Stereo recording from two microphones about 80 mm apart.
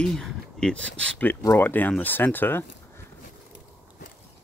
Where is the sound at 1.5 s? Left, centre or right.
Left.